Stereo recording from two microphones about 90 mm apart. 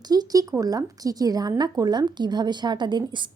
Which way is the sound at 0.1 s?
45° right (ahead or behind).